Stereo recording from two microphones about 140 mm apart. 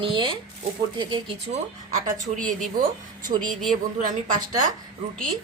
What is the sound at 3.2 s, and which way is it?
Speech, 30° right (ahead or behind).